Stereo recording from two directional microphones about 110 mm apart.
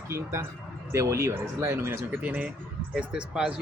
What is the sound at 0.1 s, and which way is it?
Speech, 25° right (ahead or behind).